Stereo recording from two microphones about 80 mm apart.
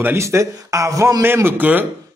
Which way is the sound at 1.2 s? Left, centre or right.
Right.